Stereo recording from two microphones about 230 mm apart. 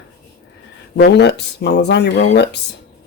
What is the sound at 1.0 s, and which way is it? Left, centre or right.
Speech, left.